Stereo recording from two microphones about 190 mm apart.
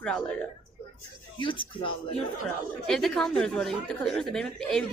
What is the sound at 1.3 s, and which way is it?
Speech, 25° left (ahead or behind).